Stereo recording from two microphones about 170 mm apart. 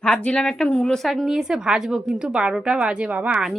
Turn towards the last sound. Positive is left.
turn(degrees=-5)  # may be behind; listen again after turning